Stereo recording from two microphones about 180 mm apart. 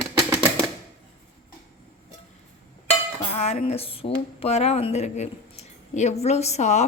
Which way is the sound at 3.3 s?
35° left (ahead or behind).